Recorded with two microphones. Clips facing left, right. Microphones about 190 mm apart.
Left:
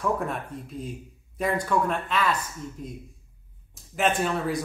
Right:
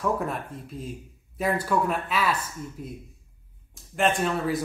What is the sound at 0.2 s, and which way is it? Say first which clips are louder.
Speech: even; centre (ahead or behind).